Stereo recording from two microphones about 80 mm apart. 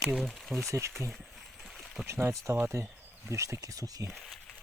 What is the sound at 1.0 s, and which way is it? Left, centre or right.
Speech, right.